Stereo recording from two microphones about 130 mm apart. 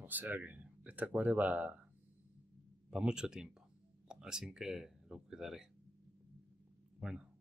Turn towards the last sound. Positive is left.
turn(degrees=-5)  # may be behind; listen again after turning